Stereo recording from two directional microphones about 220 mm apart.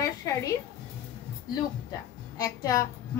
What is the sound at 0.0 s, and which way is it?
Music, 15° left (ahead or behind).